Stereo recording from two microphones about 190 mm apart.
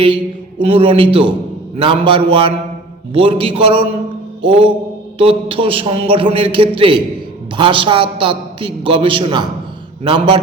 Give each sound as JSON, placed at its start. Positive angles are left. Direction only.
{"t": 0.6, "sound": "a woman's voice", "side_deg": -30}